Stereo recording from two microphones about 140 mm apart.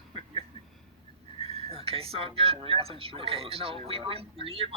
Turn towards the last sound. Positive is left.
turn(degrees=-45)  # may be behind; listen again after turning